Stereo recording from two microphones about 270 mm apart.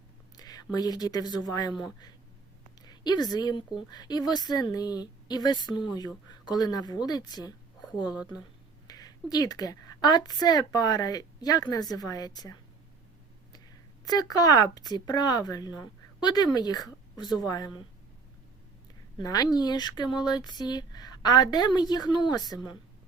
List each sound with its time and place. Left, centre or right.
0.3 s a woman's voice: centre
8.9 s a woman's voice: centre
14.0 s speech: centre
19.2 s speech: centre